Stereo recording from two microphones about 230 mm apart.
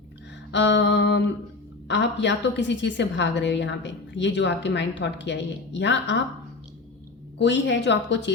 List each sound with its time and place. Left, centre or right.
0.5 s a woman's voice: left
7.3 s a woman's voice: left